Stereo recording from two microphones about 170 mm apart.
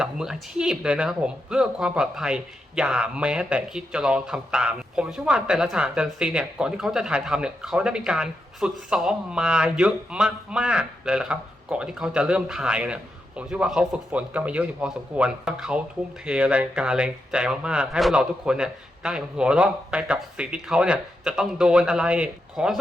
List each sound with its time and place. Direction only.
0.0 s speech: 5° right (ahead or behind)